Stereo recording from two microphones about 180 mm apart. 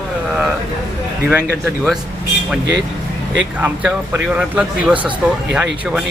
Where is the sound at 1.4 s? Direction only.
5° left (ahead or behind).